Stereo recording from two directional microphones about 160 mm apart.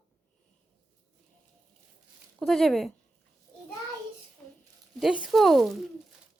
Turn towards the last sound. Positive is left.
turn(degrees=0)  # may be behind; listen again after turning